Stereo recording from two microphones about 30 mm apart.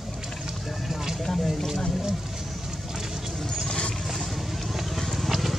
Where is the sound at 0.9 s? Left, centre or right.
Centre.